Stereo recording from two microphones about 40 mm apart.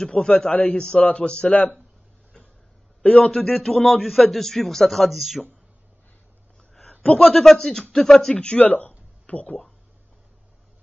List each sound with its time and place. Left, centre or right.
0.1 s speech: left
0.7 s a man's voice: left
1.5 s speech: left
3.0 s a man's voice: left
3.4 s a man's voice: centre
5.1 s speech: centre
6.9 s a man's voice: left
7.3 s a man's voice: centre
8.5 s speech: left